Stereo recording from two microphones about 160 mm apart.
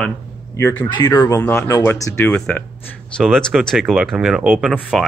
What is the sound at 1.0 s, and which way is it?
Speech, 15° left (ahead or behind).